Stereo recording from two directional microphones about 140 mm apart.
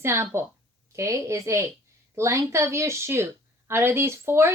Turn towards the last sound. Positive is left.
turn(degrees=-20)  # may be behind; listen again after turning